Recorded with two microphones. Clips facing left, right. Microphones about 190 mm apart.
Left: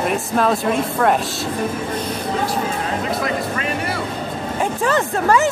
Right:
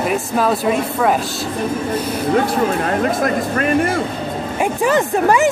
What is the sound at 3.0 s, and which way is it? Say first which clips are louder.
Speech: right 4 dB; 50° right (ahead or behind).